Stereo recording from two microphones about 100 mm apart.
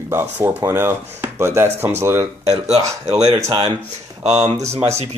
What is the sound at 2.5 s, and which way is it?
Speech, 90° right.